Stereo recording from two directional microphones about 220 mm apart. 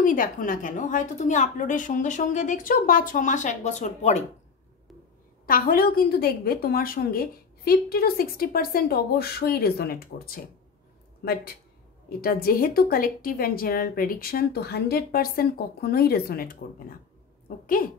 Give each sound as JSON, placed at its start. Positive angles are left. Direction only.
{"t": 0.0, "sound": "a woman's voice", "side_deg": 40}
{"t": 5.5, "sound": "a woman's voice", "side_deg": 40}
{"t": 12.2, "sound": "a woman's voice", "side_deg": 40}